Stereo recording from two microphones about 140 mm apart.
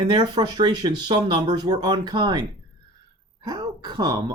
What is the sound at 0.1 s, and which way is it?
Speech, 30° right (ahead or behind).